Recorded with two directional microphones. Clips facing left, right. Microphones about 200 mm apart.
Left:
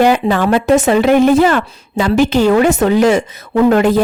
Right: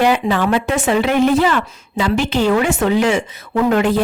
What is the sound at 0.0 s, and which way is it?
Speech, 45° left (ahead or behind).